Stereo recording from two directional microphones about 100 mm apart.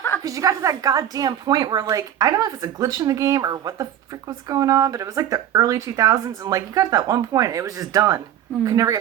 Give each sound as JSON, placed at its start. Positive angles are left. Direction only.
{"t": 0.2, "sound": "speech", "side_deg": -35}